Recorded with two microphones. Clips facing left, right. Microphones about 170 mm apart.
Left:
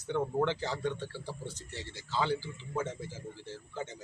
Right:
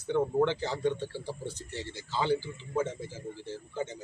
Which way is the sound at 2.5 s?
10° right (ahead or behind).